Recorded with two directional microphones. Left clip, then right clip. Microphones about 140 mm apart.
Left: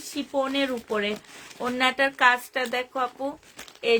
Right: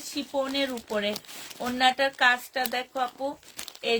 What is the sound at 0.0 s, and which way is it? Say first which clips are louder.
Speech: left 2 dB; 40° left (ahead or behind).